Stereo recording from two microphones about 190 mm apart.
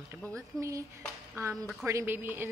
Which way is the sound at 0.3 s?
15° right (ahead or behind).